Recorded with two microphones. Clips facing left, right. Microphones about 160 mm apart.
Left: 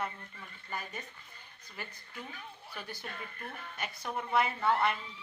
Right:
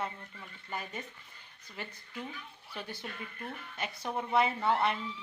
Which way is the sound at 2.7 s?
25° right (ahead or behind).